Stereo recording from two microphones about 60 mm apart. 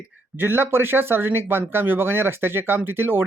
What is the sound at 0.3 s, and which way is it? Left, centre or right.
Speech, right.